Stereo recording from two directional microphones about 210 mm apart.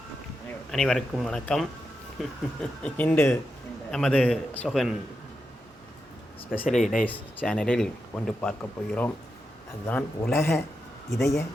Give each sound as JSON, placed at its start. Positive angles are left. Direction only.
{"t": 0.4, "sound": "speech", "side_deg": 0}
{"t": 6.6, "sound": "speech", "side_deg": 35}
{"t": 7.0, "sound": "speech", "side_deg": 10}